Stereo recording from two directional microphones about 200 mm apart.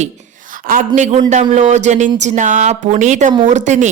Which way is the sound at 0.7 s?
40° right (ahead or behind).